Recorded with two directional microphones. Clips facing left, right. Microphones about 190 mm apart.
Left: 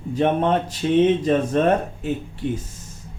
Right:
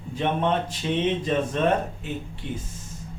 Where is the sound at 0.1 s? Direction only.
40° left (ahead or behind).